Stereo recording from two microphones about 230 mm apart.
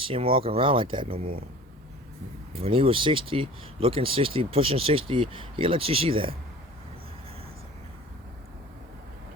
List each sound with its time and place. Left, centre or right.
0.0 s speech: right
2.6 s speech: right